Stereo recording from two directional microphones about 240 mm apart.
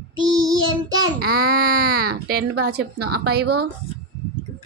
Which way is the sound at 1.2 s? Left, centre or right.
Right.